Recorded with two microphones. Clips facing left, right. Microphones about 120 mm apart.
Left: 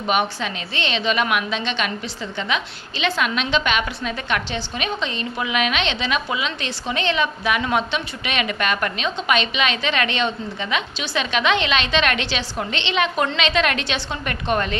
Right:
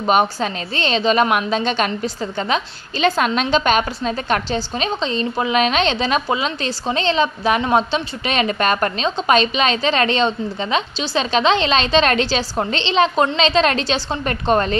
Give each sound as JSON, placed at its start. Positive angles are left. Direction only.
{"t": 0.0, "sound": "a woman's voice", "side_deg": -40}